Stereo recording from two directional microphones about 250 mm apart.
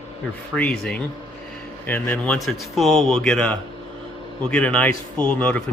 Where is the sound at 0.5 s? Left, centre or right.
Centre.